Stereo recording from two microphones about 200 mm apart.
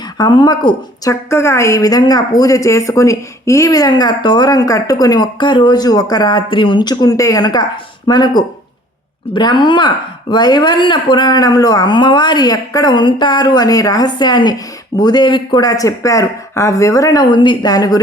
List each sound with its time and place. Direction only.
0.2 s speech: 20° left (ahead or behind)